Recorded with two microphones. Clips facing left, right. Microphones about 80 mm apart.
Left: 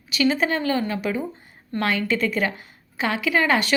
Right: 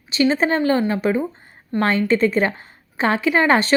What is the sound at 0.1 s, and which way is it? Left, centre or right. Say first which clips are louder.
A woman's voice: right 3 dB; right.